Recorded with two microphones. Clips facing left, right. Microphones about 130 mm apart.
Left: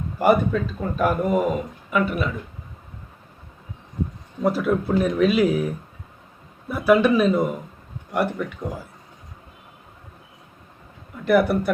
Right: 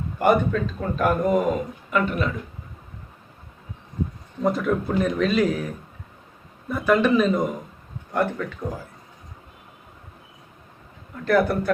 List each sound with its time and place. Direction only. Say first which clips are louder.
0.2 s speech: left 1 dB; 5° left (ahead or behind)
4.4 s speech: left 1 dB; 5° left (ahead or behind)
11.3 s speech: left 2 dB; 10° left (ahead or behind)